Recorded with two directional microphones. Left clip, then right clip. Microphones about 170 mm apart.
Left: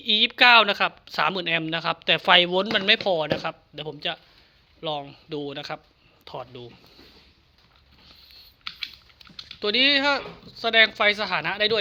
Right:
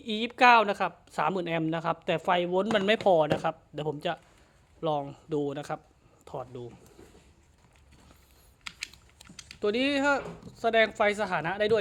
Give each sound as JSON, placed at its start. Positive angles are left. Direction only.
{"t": 0.0, "sound": "speech", "side_deg": -15}
{"t": 2.7, "sound": "speech", "side_deg": -15}
{"t": 3.8, "sound": "speech", "side_deg": -35}
{"t": 9.6, "sound": "speech", "side_deg": -15}